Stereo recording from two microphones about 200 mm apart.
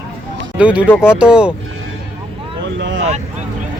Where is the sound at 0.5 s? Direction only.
5° right (ahead or behind).